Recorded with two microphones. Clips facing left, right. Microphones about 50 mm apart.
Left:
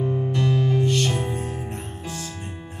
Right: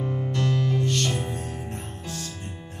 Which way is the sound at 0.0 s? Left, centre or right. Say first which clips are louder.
Left 4 dB; centre.